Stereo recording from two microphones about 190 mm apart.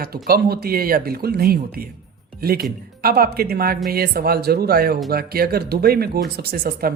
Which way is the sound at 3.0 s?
50° right (ahead or behind).